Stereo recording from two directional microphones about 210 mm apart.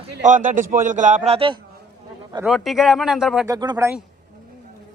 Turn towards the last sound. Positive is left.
turn(degrees=-15)  # may be behind; listen again after turning